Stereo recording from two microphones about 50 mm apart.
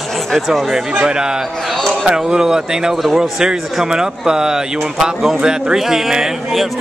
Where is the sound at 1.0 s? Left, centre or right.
Centre.